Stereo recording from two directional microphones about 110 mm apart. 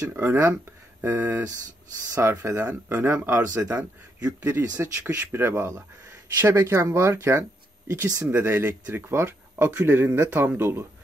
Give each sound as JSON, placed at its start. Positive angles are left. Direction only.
{"t": 0.0, "sound": "speech", "side_deg": -20}